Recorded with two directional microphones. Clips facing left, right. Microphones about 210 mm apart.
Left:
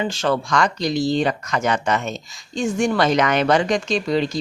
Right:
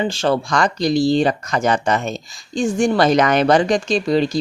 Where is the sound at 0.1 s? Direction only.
30° right (ahead or behind).